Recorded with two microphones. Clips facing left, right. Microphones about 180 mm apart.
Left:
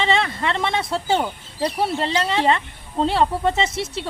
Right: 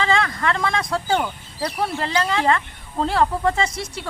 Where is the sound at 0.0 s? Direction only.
25° left (ahead or behind).